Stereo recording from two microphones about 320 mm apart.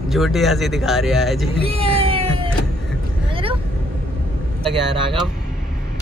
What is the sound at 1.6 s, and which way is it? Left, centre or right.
Music, centre.